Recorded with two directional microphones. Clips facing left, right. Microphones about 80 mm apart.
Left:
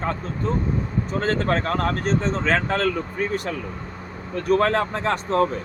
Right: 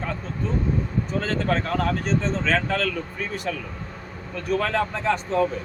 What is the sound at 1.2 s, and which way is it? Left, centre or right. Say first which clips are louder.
Speech: left 2 dB; left.